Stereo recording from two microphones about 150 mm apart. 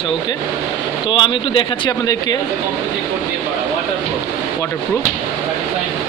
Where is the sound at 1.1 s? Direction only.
35° left (ahead or behind).